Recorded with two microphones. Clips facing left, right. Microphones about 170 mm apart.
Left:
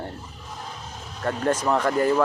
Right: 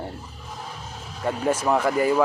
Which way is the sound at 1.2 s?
10° right (ahead or behind).